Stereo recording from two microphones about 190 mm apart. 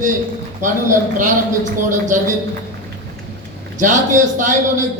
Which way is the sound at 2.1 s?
45° right (ahead or behind).